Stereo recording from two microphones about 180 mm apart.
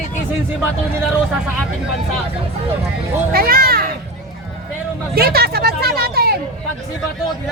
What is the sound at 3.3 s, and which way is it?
Speech, 55° right (ahead or behind).